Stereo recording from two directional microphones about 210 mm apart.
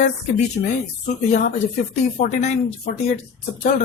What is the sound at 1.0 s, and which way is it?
A woman's voice, 35° left (ahead or behind).